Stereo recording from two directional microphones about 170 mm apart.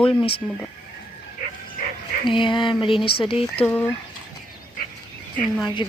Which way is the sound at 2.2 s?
30° left (ahead or behind).